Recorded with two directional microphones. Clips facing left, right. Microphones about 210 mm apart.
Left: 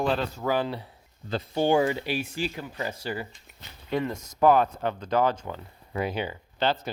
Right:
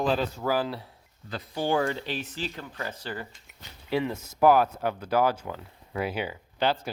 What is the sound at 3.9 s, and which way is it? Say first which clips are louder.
Speech: even; 5° right (ahead or behind).